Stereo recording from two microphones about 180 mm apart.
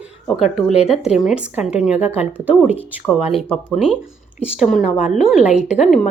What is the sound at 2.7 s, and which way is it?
A woman's voice, 5° left (ahead or behind).